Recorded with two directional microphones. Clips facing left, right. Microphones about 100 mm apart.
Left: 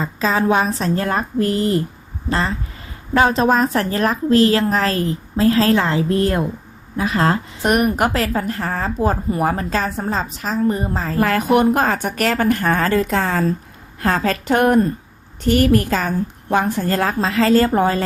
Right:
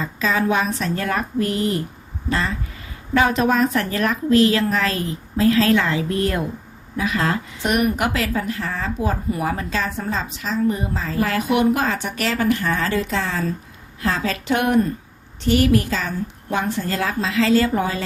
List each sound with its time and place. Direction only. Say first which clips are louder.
0.0 s a woman's voice: left 3 dB; 35° left (ahead or behind)
3.2 s a woman's voice: left 2 dB; 35° left (ahead or behind)